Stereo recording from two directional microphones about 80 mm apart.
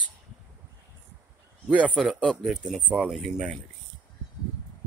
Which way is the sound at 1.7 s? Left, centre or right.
Centre.